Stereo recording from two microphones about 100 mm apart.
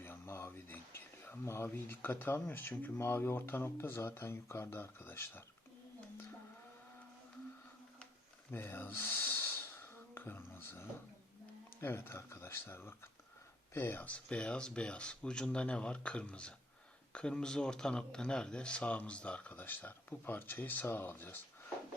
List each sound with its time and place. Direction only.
0.0 s speech: 25° left (ahead or behind)
8.4 s snort: 25° left (ahead or behind)
11.8 s speech: 20° left (ahead or behind)